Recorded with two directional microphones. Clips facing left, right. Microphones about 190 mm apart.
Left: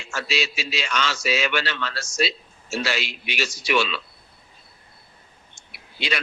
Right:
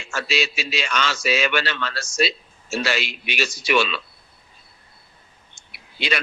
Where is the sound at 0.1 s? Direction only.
55° right (ahead or behind).